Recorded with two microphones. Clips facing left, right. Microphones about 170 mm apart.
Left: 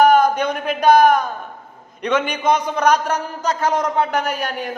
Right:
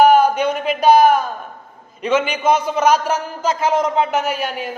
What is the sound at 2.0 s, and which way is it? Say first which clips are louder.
A man's voice: right 2 dB; 5° right (ahead or behind).